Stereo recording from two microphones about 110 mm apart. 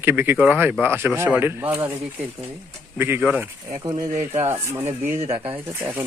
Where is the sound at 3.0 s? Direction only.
20° right (ahead or behind).